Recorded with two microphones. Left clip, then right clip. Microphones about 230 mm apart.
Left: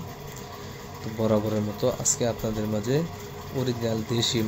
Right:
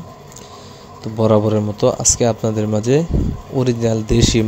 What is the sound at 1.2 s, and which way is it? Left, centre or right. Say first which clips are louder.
Speech: right 10 dB; right.